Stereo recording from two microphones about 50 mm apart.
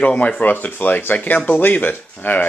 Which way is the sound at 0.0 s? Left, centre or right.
Left.